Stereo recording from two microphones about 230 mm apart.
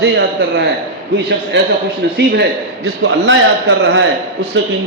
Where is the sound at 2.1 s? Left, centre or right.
Right.